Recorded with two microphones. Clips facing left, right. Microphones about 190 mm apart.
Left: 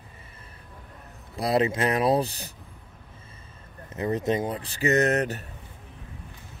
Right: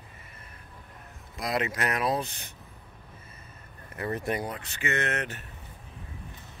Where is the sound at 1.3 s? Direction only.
35° left (ahead or behind).